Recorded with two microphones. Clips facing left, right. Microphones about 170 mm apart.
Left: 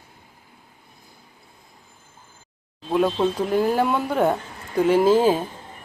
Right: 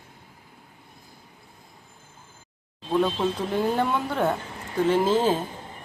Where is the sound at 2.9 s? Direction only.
10° left (ahead or behind).